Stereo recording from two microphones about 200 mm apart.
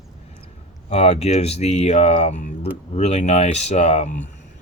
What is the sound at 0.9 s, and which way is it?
Speech, 30° left (ahead or behind).